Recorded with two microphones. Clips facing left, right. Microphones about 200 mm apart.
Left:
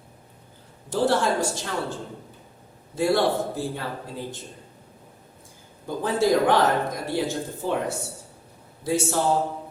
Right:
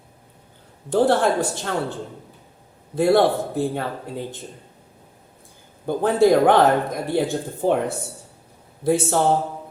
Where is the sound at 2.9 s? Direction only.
55° right (ahead or behind).